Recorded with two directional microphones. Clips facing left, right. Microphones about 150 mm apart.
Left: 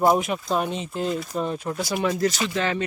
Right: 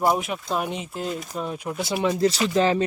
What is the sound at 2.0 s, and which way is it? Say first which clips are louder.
Speech: right 3 dB; 25° right (ahead or behind).